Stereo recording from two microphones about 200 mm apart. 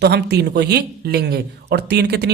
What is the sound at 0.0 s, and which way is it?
Speech, 55° right (ahead or behind).